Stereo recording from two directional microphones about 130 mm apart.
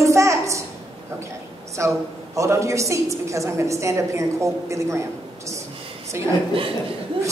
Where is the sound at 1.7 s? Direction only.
25° right (ahead or behind).